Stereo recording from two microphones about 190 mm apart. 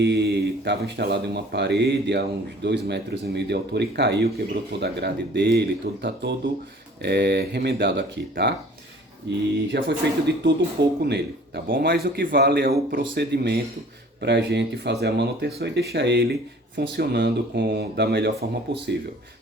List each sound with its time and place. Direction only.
0.0 s speech: 65° right (ahead or behind)
9.7 s speech: 65° right (ahead or behind)